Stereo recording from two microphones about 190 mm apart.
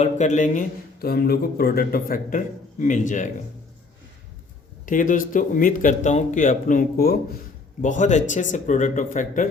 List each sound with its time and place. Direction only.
0.0 s a man's voice: 40° left (ahead or behind)
4.9 s a man's voice: 45° left (ahead or behind)
7.8 s speech: 40° left (ahead or behind)